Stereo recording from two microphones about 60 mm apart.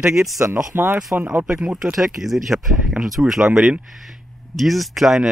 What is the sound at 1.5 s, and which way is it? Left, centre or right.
Speech, centre.